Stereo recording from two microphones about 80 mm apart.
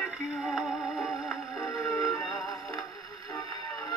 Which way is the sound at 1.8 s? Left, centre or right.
Left.